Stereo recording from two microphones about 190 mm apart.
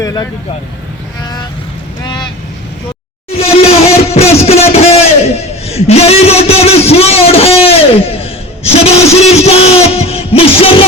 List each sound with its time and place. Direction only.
0.0 s vehicle: 20° left (ahead or behind)
2.0 s vehicle: 25° left (ahead or behind)
3.3 s a sound: 30° left (ahead or behind)